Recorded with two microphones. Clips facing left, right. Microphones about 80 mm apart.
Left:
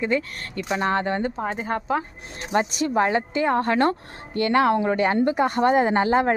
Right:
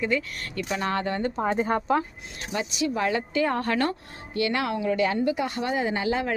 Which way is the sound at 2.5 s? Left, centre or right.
Left.